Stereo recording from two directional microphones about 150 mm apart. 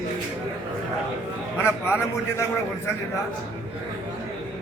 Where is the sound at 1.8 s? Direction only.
15° left (ahead or behind).